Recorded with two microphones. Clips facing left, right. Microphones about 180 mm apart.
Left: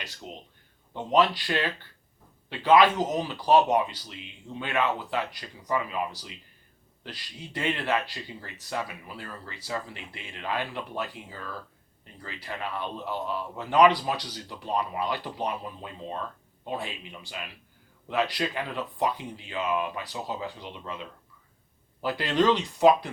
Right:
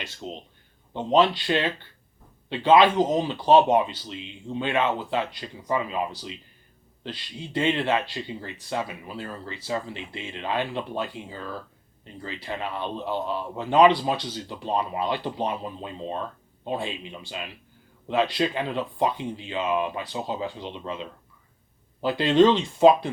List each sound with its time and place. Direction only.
0.0 s a man's voice: 25° right (ahead or behind)